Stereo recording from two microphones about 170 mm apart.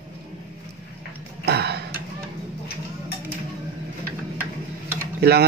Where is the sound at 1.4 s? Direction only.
75° right (ahead or behind).